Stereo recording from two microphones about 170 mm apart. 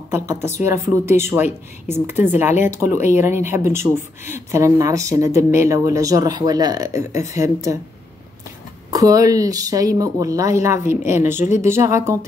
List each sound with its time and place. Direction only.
0.1 s speech: 15° right (ahead or behind)
8.9 s speech: 20° right (ahead or behind)